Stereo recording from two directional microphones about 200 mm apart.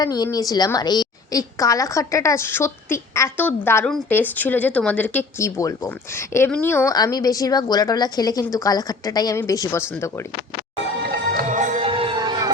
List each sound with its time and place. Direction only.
0.0 s a woman's voice: 20° left (ahead or behind)
11.4 s music: 40° right (ahead or behind)
11.9 s music: 25° right (ahead or behind)